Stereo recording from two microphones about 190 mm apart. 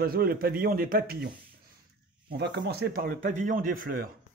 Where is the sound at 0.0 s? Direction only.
50° right (ahead or behind).